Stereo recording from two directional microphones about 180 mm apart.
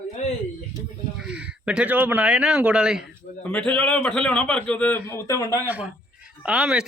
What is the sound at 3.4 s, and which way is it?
A man's voice, 10° left (ahead or behind).